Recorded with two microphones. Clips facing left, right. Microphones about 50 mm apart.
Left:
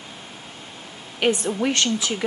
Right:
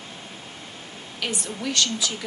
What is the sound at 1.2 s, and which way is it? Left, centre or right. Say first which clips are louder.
Speech: left 9 dB; left.